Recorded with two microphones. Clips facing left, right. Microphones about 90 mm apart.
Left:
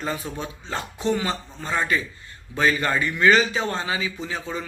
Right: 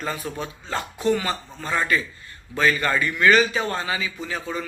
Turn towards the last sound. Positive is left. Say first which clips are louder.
# right 1 dB
turn(degrees=20)  # may be behind; listen again after turning